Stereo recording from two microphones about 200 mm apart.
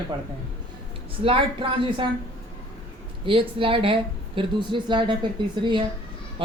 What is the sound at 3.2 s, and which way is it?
Speech, 25° right (ahead or behind).